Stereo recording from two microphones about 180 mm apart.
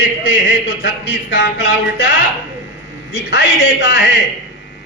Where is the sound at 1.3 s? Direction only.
85° left.